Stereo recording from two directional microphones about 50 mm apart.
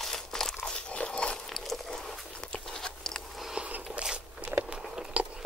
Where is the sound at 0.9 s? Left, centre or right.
Centre.